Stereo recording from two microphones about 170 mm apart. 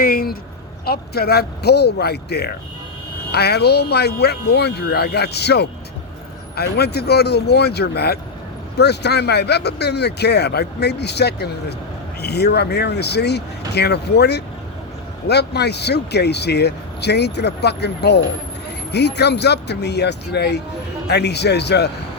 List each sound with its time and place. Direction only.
0.0 s speech: 60° left (ahead or behind); by 21.8 s 80° left